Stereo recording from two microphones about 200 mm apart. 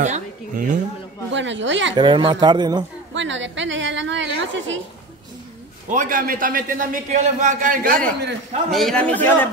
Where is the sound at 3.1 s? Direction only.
65° right (ahead or behind).